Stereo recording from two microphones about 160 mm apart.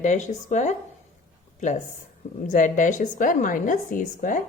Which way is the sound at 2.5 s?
50° left (ahead or behind).